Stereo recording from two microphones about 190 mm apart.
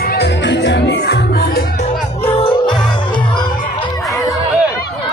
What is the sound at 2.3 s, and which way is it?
Music, 25° left (ahead or behind).